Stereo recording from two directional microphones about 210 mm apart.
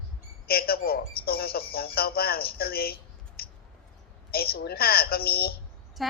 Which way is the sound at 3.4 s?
45° left (ahead or behind).